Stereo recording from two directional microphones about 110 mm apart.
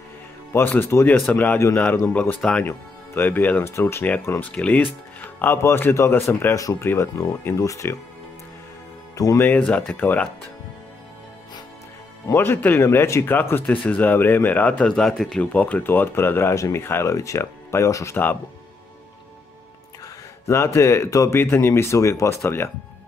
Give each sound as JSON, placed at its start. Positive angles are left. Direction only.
{"t": 0.5, "sound": "speech", "side_deg": 20}
{"t": 9.1, "sound": "speech", "side_deg": 30}
{"t": 9.4, "sound": "speech", "side_deg": 15}
{"t": 12.3, "sound": "speech", "side_deg": 20}
{"t": 15.5, "sound": "speech", "side_deg": 15}
{"t": 20.4, "sound": "speech", "side_deg": 25}